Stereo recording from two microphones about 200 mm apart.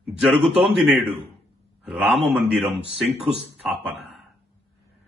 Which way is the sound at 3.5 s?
Centre (ahead or behind).